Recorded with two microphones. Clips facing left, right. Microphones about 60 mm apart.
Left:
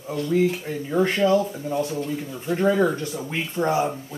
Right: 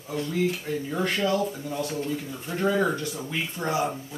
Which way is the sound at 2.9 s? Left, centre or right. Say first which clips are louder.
Left 2 dB; left.